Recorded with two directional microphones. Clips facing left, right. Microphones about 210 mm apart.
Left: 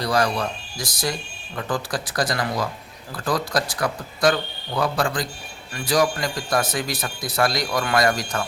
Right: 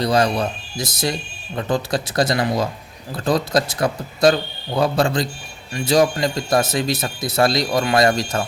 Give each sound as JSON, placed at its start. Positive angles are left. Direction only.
{"t": 0.0, "sound": "speech", "side_deg": -25}